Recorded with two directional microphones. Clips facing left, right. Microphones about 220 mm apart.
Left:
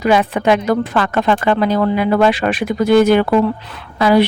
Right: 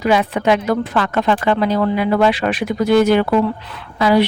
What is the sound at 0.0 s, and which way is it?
Speech, 50° left (ahead or behind).